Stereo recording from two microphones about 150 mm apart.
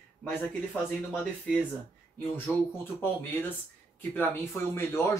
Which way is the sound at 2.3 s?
15° left (ahead or behind).